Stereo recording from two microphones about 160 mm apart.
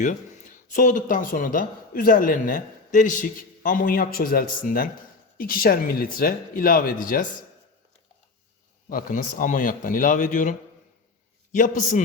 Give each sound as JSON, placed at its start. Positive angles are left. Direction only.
{"t": 0.7, "sound": "speech", "side_deg": 55}
{"t": 8.9, "sound": "speech", "side_deg": 60}
{"t": 11.5, "sound": "speech", "side_deg": 55}